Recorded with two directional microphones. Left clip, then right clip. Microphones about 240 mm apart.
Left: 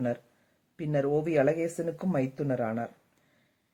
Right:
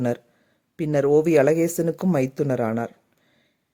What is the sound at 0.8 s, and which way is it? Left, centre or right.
A man's voice, right.